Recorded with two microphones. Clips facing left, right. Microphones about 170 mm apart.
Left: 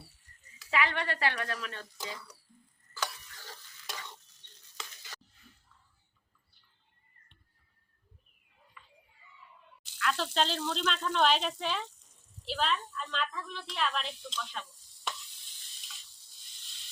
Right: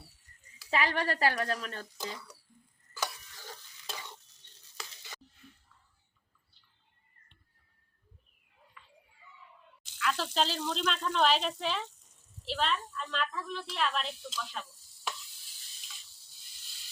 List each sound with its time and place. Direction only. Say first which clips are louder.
0.7 s a woman's voice: right 1 dB; 35° right (ahead or behind)
2.9 s stir: right 1 dB; 15° right (ahead or behind)
9.9 s speech: even; centre (ahead or behind)
12.5 s a sound: even; centre (ahead or behind)